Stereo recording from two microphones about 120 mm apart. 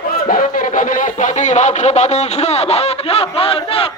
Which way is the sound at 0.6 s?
90° left.